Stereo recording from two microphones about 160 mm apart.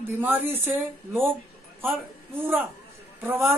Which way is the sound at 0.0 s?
10° right (ahead or behind).